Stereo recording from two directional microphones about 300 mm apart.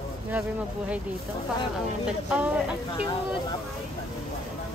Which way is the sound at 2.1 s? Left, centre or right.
Centre.